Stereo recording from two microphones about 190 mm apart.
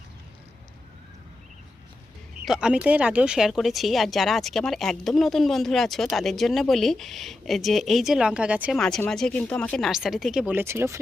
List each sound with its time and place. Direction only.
2.4 s speech: 5° right (ahead or behind)
8.8 s speech: 5° left (ahead or behind); by 11.0 s 15° right (ahead or behind)